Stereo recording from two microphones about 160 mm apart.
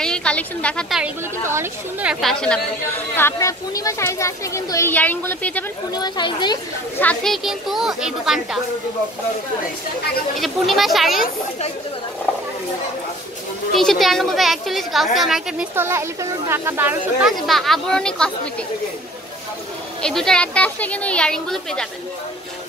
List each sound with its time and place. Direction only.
0.0 s a woman's voice: 5° left (ahead or behind)
1.4 s speech: 15° right (ahead or behind)
3.2 s speech: 15° left (ahead or behind)
5.9 s speech: 25° left (ahead or behind)
7.0 s speech: 10° left (ahead or behind)
7.4 s a woman's voice: centre (ahead or behind)
10.4 s a woman's voice: centre (ahead or behind)
13.7 s a woman's voice: centre (ahead or behind)
15.7 s speech: 15° right (ahead or behind)
17.3 s a woman's voice: centre (ahead or behind)
20.0 s a woman's voice: 5° left (ahead or behind)